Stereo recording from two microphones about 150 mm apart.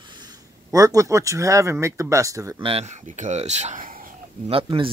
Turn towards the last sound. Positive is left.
turn(degrees=-35)  # may be behind; listen again after turning